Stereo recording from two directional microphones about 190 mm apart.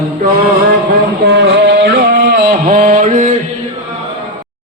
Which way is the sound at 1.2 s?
65° right (ahead or behind).